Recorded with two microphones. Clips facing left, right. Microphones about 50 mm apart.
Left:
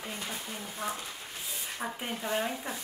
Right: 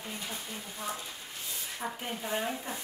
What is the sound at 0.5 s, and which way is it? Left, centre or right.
Speech, left.